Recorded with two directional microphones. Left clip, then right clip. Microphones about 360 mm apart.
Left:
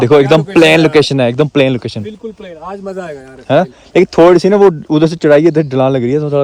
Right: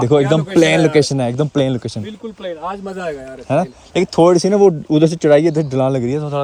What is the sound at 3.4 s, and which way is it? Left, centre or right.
Speech, left.